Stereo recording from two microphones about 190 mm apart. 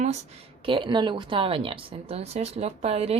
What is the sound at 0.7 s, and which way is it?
Speech, 25° right (ahead or behind).